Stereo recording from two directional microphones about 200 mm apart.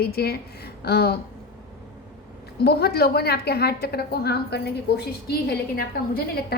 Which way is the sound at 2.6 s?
50° left (ahead or behind).